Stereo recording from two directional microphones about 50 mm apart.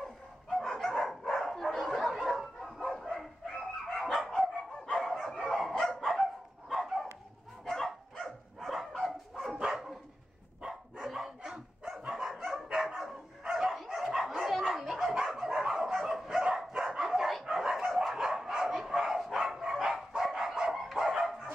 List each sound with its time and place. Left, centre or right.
0.6 s dog: centre
5.2 s bow-wow: centre
5.9 s dog: centre
7.6 s dog: centre
11.1 s dog: centre
12.3 s dog: centre
12.8 s dog: centre